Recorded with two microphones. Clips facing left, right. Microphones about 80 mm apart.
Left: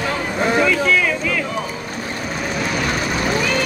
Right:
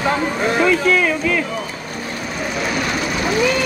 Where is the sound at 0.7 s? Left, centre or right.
Right.